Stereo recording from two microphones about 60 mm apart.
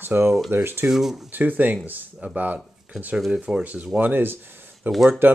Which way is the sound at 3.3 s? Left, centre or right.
Centre.